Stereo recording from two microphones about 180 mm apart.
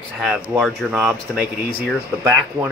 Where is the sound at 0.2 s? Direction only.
5° right (ahead or behind).